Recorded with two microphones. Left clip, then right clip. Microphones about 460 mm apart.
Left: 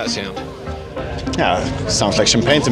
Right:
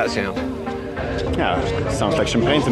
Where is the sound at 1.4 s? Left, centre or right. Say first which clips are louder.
Left 4 dB; left.